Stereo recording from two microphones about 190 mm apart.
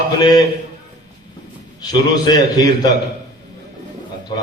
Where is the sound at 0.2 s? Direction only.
20° left (ahead or behind).